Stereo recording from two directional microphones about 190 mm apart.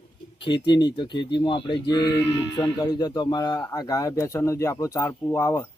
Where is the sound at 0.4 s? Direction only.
25° left (ahead or behind).